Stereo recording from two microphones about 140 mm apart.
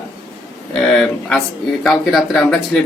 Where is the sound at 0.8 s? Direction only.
Centre (ahead or behind).